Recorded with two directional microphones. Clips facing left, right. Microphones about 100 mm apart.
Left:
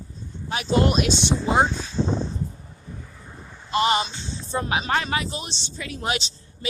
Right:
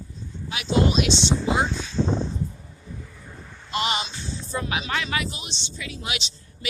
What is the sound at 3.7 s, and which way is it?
Speech, 35° left (ahead or behind).